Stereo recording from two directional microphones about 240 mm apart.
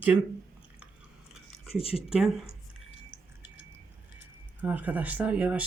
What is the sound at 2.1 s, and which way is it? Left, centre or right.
Speech, centre.